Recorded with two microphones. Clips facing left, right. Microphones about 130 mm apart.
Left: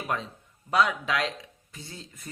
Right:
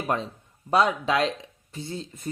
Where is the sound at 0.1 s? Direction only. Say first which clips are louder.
Right 4 dB; 30° right (ahead or behind).